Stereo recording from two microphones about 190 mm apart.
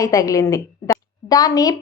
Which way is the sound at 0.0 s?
15° left (ahead or behind).